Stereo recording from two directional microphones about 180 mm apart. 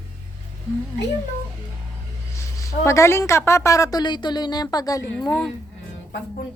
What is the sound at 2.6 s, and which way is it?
A woman's voice, 15° left (ahead or behind).